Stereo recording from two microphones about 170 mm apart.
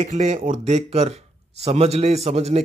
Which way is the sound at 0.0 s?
45° right (ahead or behind).